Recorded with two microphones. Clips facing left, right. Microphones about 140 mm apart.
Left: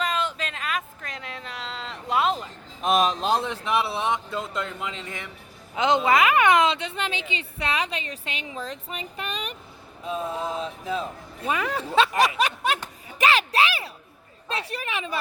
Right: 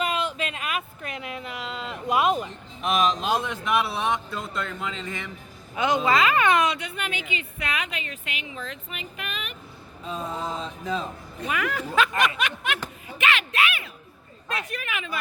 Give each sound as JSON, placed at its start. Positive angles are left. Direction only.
{"t": 0.0, "sound": "speech", "side_deg": -10}
{"t": 2.8, "sound": "a woman's voice", "side_deg": 35}
{"t": 10.1, "sound": "a sound", "side_deg": 5}
{"t": 11.4, "sound": "a woman's voice", "side_deg": 30}